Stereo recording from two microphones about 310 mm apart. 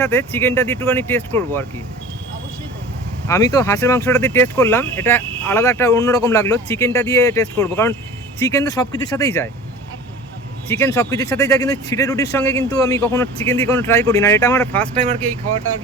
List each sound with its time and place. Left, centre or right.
0.0 s speech: centre
3.2 s speech: centre
10.7 s speech: centre